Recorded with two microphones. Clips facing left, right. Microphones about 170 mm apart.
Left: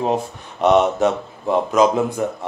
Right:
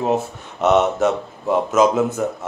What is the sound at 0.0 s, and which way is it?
Speech, 5° right (ahead or behind).